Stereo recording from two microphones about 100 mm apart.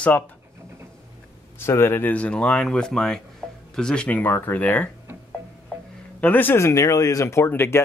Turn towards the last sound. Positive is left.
turn(degrees=25)  # may be behind; listen again after turning